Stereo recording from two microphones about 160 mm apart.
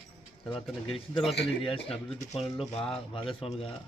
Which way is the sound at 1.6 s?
35° left (ahead or behind).